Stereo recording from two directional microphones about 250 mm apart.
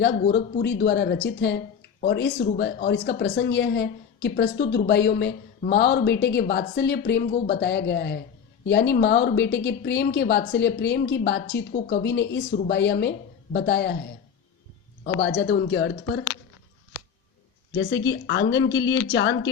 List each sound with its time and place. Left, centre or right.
0.3 s a woman's voice: left
15.2 s a woman's voice: left
17.7 s a woman's voice: left